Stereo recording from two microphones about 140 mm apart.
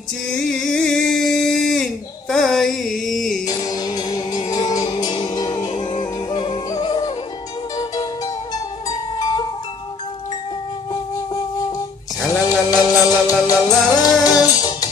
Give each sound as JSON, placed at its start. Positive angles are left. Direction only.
{"t": 0.3, "sound": "a sound", "side_deg": 5}
{"t": 3.4, "sound": "music", "side_deg": 25}
{"t": 12.3, "sound": "music", "side_deg": 25}